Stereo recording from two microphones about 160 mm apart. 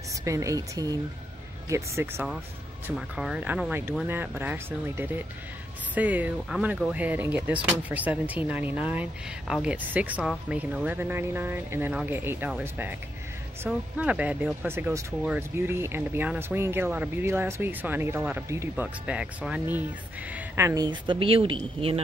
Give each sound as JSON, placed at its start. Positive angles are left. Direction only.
{"t": 0.2, "sound": "speech", "side_deg": -20}
{"t": 2.9, "sound": "speech", "side_deg": -5}